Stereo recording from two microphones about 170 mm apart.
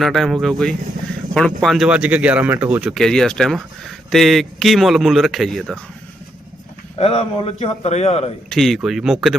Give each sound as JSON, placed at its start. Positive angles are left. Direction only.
{"t": 0.0, "sound": "speech", "side_deg": 0}
{"t": 7.0, "sound": "a man's voice", "side_deg": 35}
{"t": 8.4, "sound": "speech", "side_deg": 0}